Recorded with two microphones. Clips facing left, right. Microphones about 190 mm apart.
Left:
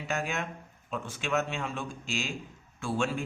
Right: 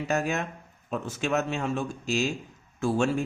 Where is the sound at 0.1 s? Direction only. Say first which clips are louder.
Right 4 dB; 40° right (ahead or behind).